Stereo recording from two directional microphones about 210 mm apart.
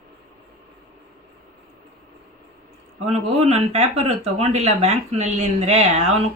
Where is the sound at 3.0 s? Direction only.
30° right (ahead or behind).